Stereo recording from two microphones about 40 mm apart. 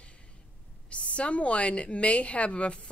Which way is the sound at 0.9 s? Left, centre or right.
Left.